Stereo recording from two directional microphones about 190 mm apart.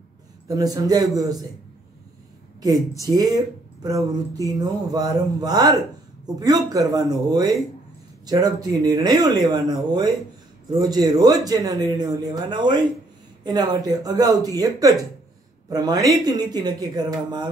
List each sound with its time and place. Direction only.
0.5 s speech: 20° right (ahead or behind)
3.0 s speech: 20° right (ahead or behind)